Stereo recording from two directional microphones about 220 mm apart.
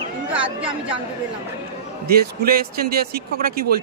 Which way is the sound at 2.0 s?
45° right (ahead or behind).